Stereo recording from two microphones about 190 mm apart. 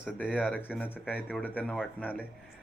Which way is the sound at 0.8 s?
10° left (ahead or behind).